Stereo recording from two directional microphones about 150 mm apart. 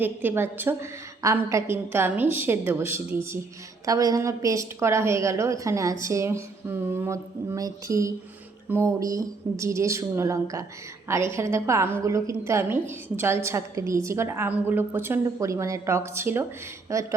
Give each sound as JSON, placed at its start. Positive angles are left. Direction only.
{"t": 0.0, "sound": "a woman's voice", "side_deg": -15}